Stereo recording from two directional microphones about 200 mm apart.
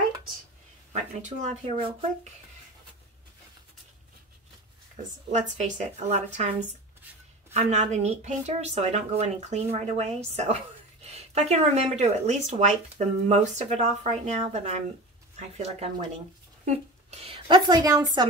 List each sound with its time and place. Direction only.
0.9 s speech: 35° right (ahead or behind)
5.6 s speech: 35° right (ahead or behind)
7.5 s a woman's voice: 35° right (ahead or behind); by 18.2 s 20° right (ahead or behind)